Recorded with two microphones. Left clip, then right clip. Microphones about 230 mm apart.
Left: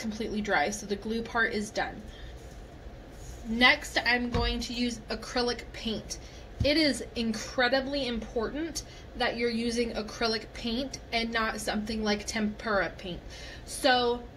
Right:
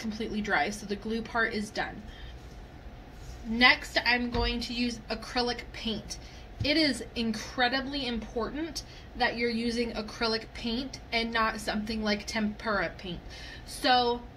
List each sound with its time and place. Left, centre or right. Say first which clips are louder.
0.0 s a woman's voice: left 1 dB; right
3.5 s a woman's voice: even; right